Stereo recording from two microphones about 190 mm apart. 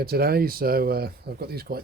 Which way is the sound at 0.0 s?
55° right (ahead or behind).